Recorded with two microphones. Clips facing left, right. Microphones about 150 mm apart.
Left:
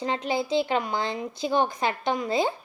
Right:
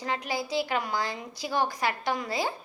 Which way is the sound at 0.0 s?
25° left (ahead or behind).